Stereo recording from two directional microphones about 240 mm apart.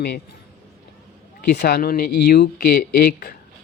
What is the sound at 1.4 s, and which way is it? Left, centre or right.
Speech, left.